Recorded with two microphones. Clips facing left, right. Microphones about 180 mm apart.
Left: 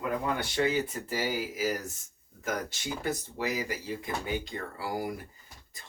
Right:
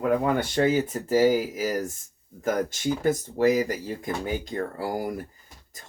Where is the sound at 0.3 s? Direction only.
45° right (ahead or behind).